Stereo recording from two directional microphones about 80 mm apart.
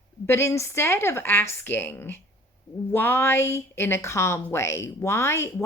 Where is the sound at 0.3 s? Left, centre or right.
Left.